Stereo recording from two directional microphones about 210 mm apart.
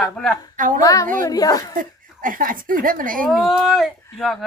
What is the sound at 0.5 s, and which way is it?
Speech, 40° right (ahead or behind).